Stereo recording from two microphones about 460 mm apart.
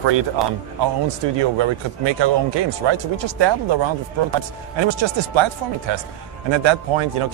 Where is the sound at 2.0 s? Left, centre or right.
Right.